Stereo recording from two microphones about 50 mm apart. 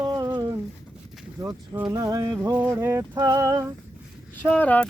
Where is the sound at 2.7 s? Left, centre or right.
Right.